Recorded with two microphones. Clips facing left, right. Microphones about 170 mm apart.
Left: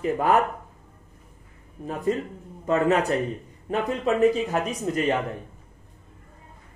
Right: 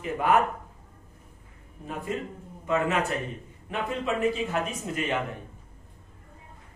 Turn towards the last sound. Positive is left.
turn(degrees=40)  # may be behind; listen again after turning